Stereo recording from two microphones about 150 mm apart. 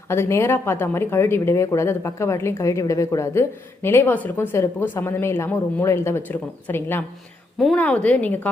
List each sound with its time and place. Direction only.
0.1 s a woman's voice: 15° left (ahead or behind)